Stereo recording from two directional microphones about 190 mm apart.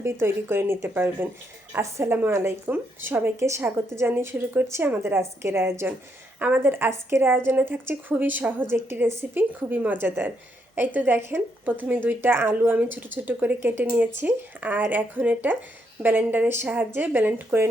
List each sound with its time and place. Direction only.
0.0 s speech: 10° right (ahead or behind)